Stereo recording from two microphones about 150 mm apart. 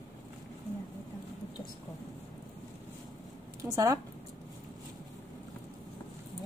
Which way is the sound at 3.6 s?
20° right (ahead or behind).